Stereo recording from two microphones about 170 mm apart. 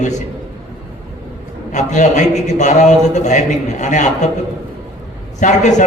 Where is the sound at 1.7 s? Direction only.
45° left (ahead or behind).